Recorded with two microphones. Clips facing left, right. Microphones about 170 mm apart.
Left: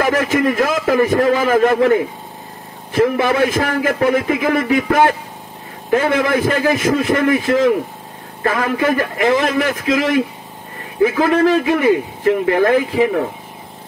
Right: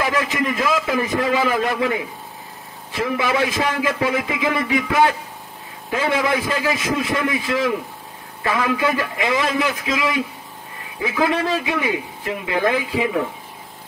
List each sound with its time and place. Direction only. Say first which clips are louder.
0.0 s a man's voice: left 6 dB; 55° left (ahead or behind)